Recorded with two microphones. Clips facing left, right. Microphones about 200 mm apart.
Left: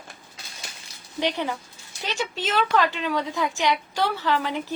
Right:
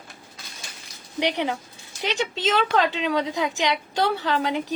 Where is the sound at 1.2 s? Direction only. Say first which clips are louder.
Right 2 dB; 15° right (ahead or behind).